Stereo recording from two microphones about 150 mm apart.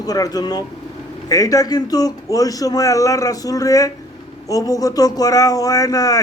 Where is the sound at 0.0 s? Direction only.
25° left (ahead or behind).